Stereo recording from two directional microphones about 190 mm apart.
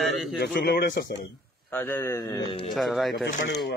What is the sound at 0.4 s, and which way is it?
Speech, 55° left (ahead or behind).